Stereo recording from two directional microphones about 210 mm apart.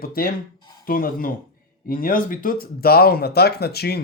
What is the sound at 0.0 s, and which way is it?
Speech, 45° left (ahead or behind).